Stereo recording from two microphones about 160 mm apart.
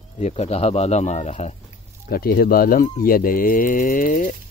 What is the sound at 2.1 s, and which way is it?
Speech, 70° left (ahead or behind).